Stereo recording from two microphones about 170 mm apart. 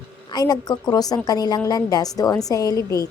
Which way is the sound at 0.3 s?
25° left (ahead or behind).